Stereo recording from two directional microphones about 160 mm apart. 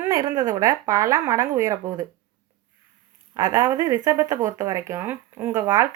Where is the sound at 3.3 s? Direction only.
15° right (ahead or behind).